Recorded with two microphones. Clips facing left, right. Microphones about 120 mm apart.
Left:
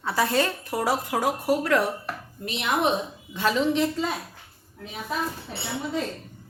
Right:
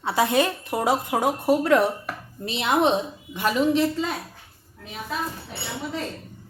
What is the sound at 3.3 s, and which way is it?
Speech, 10° right (ahead or behind).